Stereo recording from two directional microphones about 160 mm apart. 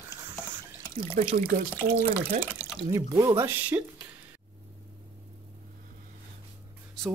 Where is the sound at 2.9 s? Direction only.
20° right (ahead or behind).